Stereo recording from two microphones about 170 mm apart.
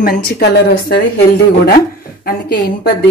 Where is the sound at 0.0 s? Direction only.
60° left (ahead or behind).